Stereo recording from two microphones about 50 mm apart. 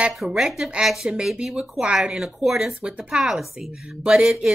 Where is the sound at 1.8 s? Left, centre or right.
Centre.